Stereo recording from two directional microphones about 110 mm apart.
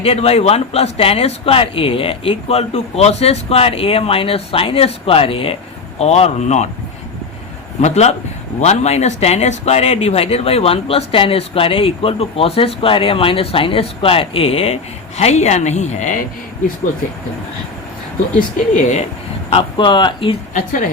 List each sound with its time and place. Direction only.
0.0 s speech: 65° left (ahead or behind)
6.0 s speech: 80° left
7.8 s speech: 90° left; by 14.8 s 65° left (ahead or behind)
15.2 s speech: 90° left
18.8 s speech: 90° left
19.5 s speech: 50° left (ahead or behind)